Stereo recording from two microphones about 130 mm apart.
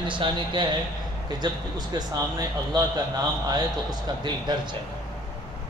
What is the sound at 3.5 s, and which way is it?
Speech, 35° right (ahead or behind).